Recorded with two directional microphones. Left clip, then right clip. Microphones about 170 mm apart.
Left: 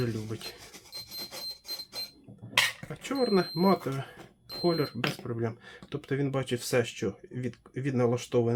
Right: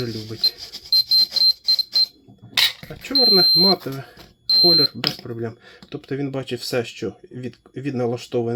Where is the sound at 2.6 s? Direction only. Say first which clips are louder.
Right 7 dB; 40° right (ahead or behind).